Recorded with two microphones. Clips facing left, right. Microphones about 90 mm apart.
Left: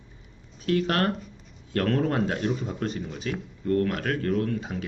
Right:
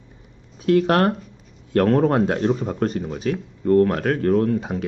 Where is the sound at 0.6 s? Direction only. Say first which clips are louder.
Right 7 dB; 40° right (ahead or behind).